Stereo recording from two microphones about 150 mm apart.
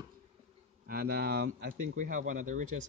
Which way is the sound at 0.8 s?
75° right (ahead or behind).